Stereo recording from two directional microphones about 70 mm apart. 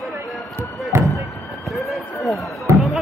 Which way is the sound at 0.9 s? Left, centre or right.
Right.